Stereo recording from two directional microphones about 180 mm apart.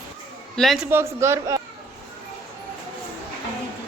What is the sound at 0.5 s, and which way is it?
Speech, centre (ahead or behind).